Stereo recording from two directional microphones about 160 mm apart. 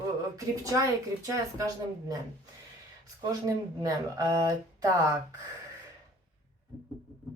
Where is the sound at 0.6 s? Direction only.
20° right (ahead or behind).